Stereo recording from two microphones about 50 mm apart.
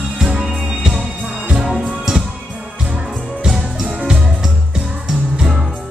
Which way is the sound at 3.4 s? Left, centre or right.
Centre.